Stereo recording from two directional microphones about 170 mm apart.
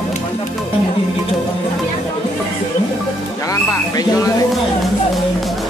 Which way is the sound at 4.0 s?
20° left (ahead or behind).